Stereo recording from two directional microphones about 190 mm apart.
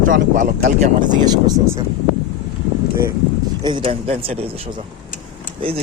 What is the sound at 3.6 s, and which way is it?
Speech, 25° right (ahead or behind).